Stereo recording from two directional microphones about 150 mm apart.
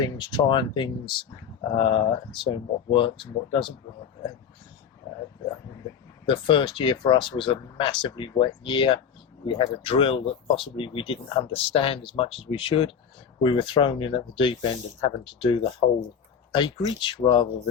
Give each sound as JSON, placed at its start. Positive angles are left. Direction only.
{"t": 0.0, "sound": "speech", "side_deg": 30}
{"t": 5.0, "sound": "dog", "side_deg": 30}
{"t": 6.2, "sound": "speech", "side_deg": 35}